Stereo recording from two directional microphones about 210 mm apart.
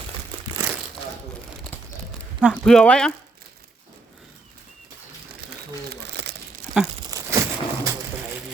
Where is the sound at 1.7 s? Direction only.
10° left (ahead or behind).